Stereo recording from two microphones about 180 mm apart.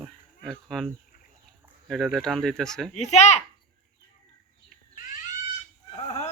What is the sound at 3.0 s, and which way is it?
Speech, 40° left (ahead or behind).